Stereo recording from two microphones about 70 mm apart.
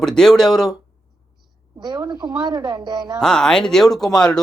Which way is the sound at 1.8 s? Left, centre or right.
Right.